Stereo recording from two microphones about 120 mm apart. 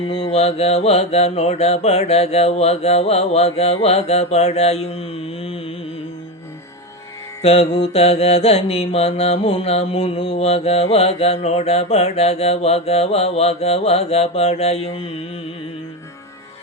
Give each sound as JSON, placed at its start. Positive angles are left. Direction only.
{"t": 0.1, "sound": "mantra", "side_deg": 50}
{"t": 7.4, "sound": "mantra", "side_deg": 55}